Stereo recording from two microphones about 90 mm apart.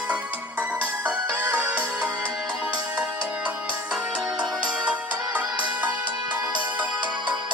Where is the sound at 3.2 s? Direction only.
15° right (ahead or behind).